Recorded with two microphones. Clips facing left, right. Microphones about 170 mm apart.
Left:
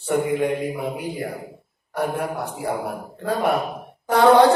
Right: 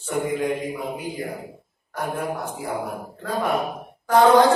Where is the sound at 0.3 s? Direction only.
60° left (ahead or behind).